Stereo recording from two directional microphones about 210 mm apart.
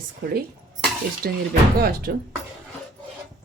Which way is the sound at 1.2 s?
45° right (ahead or behind).